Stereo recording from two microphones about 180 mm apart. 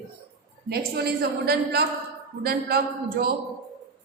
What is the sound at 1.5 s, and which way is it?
A woman's voice, 60° right (ahead or behind).